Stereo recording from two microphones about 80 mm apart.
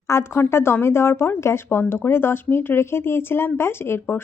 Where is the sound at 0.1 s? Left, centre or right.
Left.